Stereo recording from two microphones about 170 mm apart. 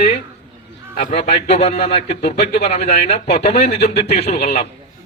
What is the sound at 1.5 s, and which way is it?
Speech, 40° left (ahead or behind).